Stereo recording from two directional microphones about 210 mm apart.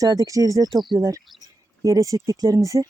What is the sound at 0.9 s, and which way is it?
Speech, 15° right (ahead or behind).